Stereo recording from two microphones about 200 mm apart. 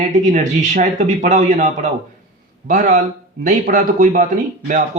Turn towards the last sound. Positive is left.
turn(degrees=-40)  # may be behind; listen again after turning